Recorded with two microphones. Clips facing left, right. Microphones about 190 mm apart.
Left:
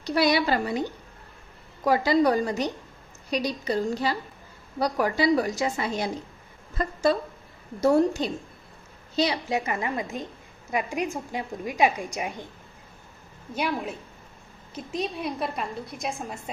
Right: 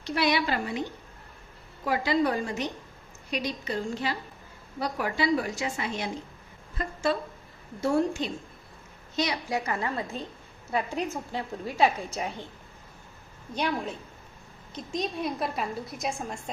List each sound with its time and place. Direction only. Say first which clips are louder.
0.0 s a woman's voice: left 4 dB; 35° left (ahead or behind)
1.9 s a woman's voice: left 5 dB; 40° left (ahead or behind); by 12.5 s 15° left (ahead or behind)
13.5 s a woman's voice: left 1 dB; 5° left (ahead or behind)